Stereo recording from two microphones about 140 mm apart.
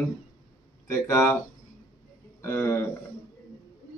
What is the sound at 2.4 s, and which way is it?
Speech, 15° left (ahead or behind).